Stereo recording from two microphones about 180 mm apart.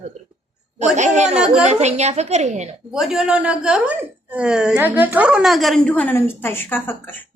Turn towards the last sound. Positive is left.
turn(degrees=10)  # may be behind; listen again after turning